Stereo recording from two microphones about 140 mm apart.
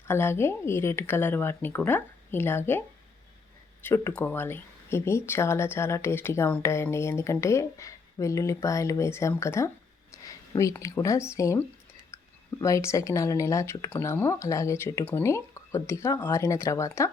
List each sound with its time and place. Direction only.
0.1 s speech: 15° left (ahead or behind)
3.8 s speech: 15° left (ahead or behind)